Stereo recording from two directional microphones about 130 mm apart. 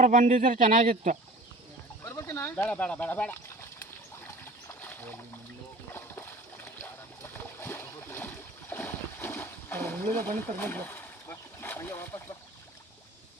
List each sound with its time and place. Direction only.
0.0 s speech: 75° right (ahead or behind)
2.0 s speech: 20° left (ahead or behind)
4.7 s splash: 15° left (ahead or behind)
7.2 s a sound: 15° left (ahead or behind)